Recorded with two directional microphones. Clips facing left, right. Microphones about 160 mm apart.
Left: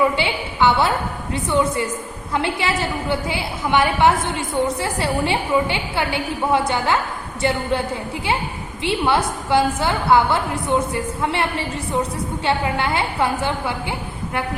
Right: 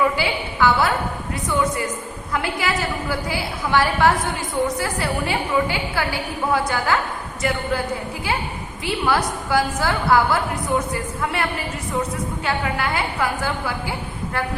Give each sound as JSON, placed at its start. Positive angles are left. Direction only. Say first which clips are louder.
{"t": 0.2, "sound": "a woman's voice", "louder": "left 1 dB", "side_deg": 25}
{"t": 8.8, "sound": "a woman's voice", "louder": "left 2 dB", "side_deg": 25}